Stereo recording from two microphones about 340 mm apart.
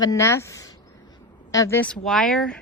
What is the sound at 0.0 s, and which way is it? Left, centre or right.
A woman's voice, centre.